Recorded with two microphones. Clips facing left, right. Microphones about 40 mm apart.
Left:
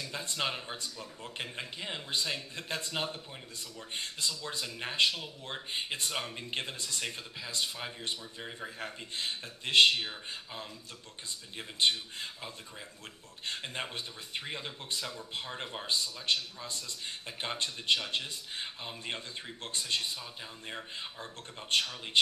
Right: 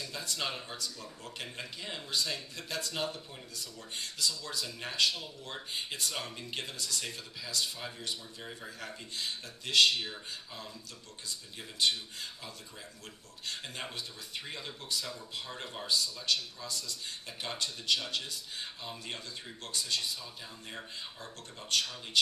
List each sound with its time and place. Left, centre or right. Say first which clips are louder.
0.0 s speech: left 2 dB; left